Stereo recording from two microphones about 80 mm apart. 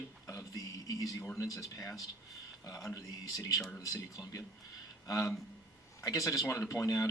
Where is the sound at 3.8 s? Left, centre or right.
Left.